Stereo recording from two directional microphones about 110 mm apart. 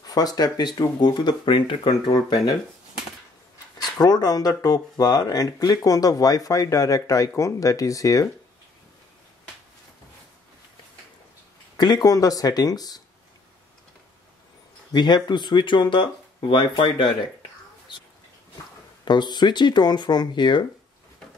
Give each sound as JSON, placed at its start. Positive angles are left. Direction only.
{"t": 0.0, "sound": "speech", "side_deg": 35}
{"t": 3.7, "sound": "speech", "side_deg": 40}
{"t": 11.7, "sound": "speech", "side_deg": 35}
{"t": 14.9, "sound": "speech", "side_deg": 40}
{"t": 19.0, "sound": "speech", "side_deg": 40}